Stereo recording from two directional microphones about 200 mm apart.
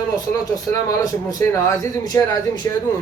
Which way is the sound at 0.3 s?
20° left (ahead or behind).